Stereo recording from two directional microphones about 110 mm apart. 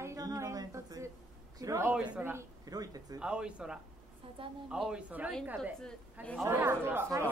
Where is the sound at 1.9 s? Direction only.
10° right (ahead or behind).